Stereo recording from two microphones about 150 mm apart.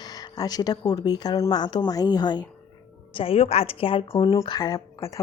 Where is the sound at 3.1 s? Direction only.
40° left (ahead or behind).